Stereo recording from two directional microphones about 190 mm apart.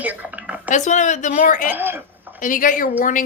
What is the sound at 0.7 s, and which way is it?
Speech, 40° left (ahead or behind).